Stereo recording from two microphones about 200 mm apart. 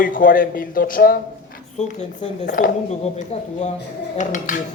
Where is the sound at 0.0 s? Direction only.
45° left (ahead or behind).